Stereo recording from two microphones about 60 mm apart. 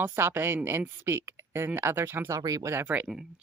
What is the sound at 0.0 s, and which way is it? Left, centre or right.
Speech, right.